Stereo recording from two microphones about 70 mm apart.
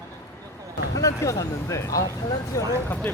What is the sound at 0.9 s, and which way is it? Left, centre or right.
Speech, left.